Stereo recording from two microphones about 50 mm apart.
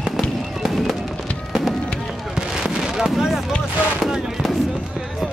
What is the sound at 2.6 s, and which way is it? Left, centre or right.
Fireworks, centre.